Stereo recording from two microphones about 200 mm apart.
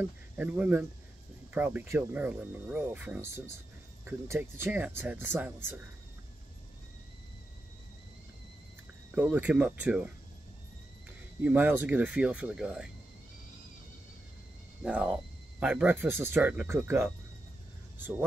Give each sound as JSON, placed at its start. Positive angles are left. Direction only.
{"t": 0.0, "sound": "speech", "side_deg": -10}
{"t": 9.1, "sound": "speech", "side_deg": -5}
{"t": 11.4, "sound": "speech", "side_deg": -10}
{"t": 14.8, "sound": "speech", "side_deg": -5}